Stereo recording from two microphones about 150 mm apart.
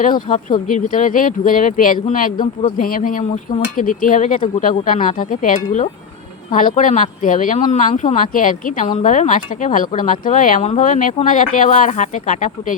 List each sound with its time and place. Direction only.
0.0 s speech: 55° left (ahead or behind)